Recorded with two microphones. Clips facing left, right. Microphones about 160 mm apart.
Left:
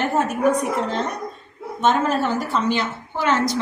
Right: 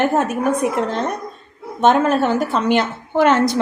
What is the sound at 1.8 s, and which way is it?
A woman's voice, 60° right (ahead or behind).